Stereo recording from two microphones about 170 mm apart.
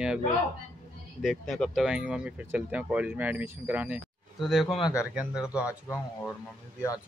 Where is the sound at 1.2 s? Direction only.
Centre (ahead or behind).